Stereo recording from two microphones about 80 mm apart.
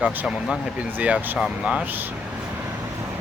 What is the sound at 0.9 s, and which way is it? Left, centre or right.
Speech, centre.